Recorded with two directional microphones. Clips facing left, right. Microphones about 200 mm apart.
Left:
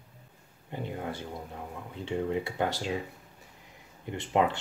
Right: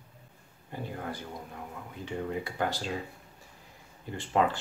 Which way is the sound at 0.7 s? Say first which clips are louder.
Left 2 dB; 20° left (ahead or behind).